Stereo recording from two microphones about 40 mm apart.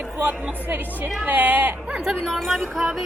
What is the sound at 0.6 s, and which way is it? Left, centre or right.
Speech, right.